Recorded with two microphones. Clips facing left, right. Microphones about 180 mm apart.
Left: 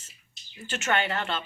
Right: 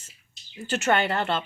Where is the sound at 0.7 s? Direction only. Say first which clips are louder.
Right 4 dB; 40° right (ahead or behind).